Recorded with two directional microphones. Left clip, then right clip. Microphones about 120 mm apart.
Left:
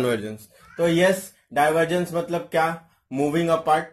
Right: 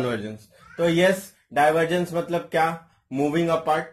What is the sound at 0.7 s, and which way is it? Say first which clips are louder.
Speech: left 1 dB; 15° left (ahead or behind).